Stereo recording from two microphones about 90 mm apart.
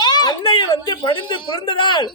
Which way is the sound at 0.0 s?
50° left (ahead or behind).